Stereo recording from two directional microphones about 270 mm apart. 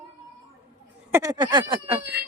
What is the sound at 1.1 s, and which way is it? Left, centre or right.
Speech, centre.